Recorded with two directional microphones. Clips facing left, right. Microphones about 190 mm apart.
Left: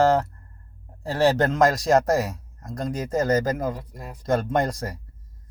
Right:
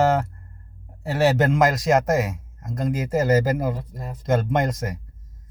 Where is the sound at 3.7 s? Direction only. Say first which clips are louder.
Right 3 dB; 25° right (ahead or behind).